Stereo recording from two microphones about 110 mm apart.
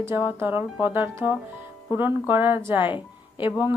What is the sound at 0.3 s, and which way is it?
Speech, 20° right (ahead or behind).